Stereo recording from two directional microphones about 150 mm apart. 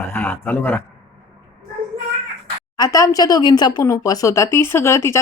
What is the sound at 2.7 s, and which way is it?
Speech, 25° left (ahead or behind).